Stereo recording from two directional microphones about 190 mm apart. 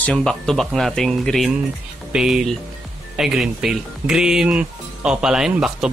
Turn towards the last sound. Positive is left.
turn(degrees=-5)  # may be behind; listen again after turning